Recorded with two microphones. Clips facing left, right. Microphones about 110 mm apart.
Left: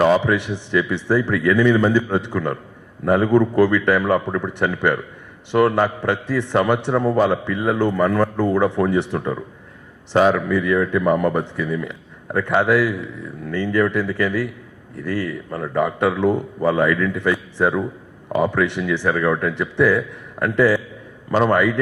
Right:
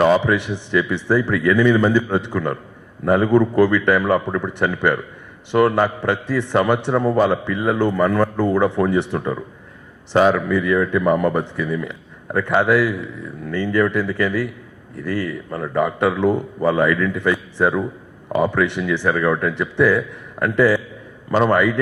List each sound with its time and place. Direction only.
0.0 s a man's voice: 20° right (ahead or behind)